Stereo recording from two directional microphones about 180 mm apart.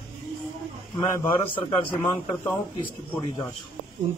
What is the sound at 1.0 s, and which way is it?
A man's voice, 15° left (ahead or behind).